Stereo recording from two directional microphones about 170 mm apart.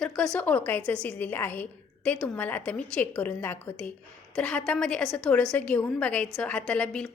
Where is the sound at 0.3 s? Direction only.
10° left (ahead or behind).